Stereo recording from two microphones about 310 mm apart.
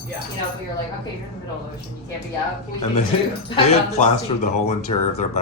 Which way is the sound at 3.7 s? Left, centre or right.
Left.